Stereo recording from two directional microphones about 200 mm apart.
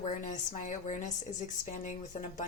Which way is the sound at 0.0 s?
35° left (ahead or behind).